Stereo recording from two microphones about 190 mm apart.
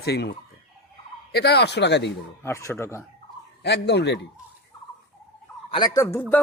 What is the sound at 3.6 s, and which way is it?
Speech, 60° left (ahead or behind).